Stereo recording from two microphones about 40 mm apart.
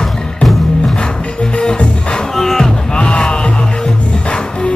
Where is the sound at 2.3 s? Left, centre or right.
Centre.